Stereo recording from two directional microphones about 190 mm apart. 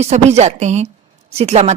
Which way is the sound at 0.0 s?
35° right (ahead or behind).